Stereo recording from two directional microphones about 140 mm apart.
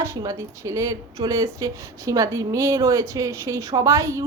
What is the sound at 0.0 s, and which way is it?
Speech, 25° right (ahead or behind).